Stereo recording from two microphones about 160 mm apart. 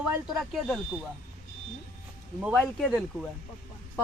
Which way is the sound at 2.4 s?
5° right (ahead or behind).